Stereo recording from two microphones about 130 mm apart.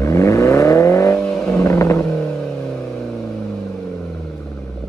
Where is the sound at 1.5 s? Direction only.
20° left (ahead or behind).